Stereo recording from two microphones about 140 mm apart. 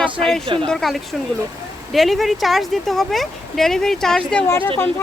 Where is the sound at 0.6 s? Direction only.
5° left (ahead or behind).